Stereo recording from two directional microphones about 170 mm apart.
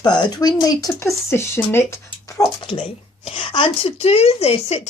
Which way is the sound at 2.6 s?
30° left (ahead or behind).